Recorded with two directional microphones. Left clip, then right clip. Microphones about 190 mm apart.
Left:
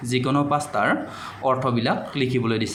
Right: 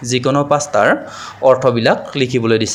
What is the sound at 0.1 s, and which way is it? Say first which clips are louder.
Speech: right 8 dB; 35° right (ahead or behind).